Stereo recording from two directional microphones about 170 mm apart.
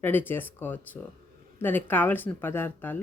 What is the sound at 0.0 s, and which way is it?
A woman's voice, 10° left (ahead or behind).